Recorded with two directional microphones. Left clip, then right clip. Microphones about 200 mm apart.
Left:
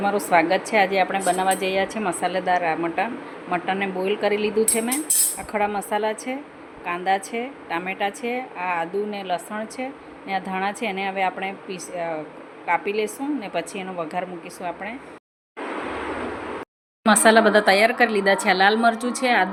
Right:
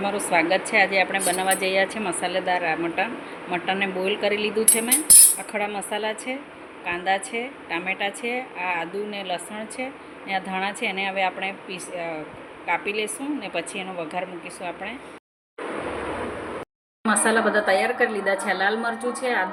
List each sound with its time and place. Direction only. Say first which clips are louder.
0.0 s speech: left 3 dB; 10° left (ahead or behind)
17.1 s speech: left 5 dB; 55° left (ahead or behind)